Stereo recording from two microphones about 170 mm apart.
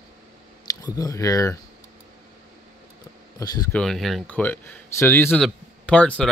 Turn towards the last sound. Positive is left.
turn(degrees=5)  # may be behind; listen again after turning